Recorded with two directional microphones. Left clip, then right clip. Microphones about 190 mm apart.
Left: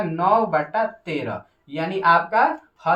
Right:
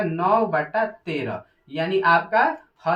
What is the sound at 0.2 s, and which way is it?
Speech, 25° left (ahead or behind).